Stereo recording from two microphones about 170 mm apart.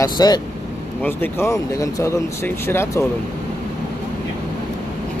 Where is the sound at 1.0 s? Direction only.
15° left (ahead or behind).